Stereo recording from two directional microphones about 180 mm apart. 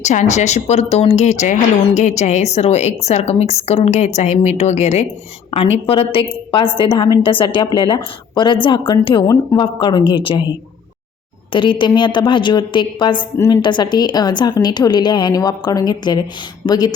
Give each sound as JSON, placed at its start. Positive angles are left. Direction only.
{"t": 0.0, "sound": "a woman's voice", "side_deg": 40}
{"t": 11.5, "sound": "a woman's voice", "side_deg": 25}